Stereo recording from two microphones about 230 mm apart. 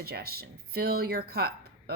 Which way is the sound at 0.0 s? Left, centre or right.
Right.